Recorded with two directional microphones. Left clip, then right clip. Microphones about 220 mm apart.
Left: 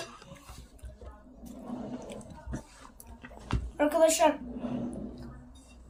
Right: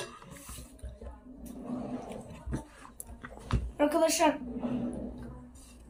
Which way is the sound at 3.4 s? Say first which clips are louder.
Even; 15° left (ahead or behind).